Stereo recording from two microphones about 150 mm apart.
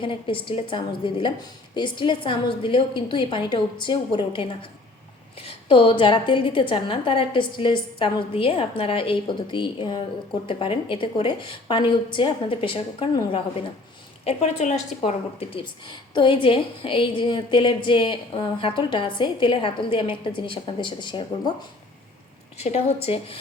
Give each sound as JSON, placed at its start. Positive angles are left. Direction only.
{"t": 0.0, "sound": "speech", "side_deg": 35}
{"t": 14.3, "sound": "speech", "side_deg": 50}
{"t": 22.5, "sound": "a woman's voice", "side_deg": 45}